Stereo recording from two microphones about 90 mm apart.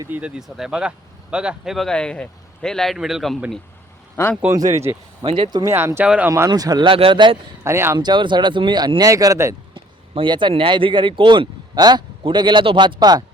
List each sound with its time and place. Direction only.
0.1 s speech: 10° right (ahead or behind)
1.9 s a man's voice: 10° left (ahead or behind)
4.4 s speech: 15° right (ahead or behind)
5.2 s speech: 85° right
5.6 s speech: 25° right (ahead or behind)
6.1 s speech: 15° right (ahead or behind)
6.5 s speech: 50° right (ahead or behind)
6.8 s speech: 80° right
7.6 s speech: 30° right (ahead or behind)
7.9 s speech: 55° right (ahead or behind); by 9.6 s 35° right (ahead or behind)
9.7 s speech: 60° right (ahead or behind)
11.7 s a man's voice: 50° right (ahead or behind)